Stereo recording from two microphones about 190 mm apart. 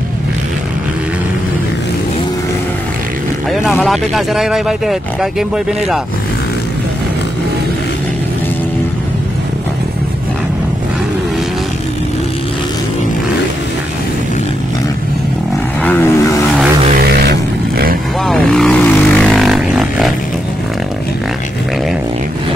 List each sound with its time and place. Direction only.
3.8 s speech: centre (ahead or behind)
15.8 s vehicle: 10° left (ahead or behind)
17.1 s vehicle: 55° right (ahead or behind)
18.2 s vehicle: centre (ahead or behind)